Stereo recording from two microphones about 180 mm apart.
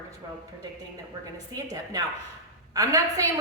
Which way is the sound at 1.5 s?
20° right (ahead or behind).